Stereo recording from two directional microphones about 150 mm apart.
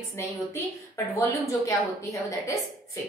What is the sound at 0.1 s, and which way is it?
A woman's voice, 20° left (ahead or behind).